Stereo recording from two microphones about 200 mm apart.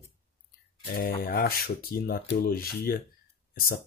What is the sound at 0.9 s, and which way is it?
Speech, 45° left (ahead or behind).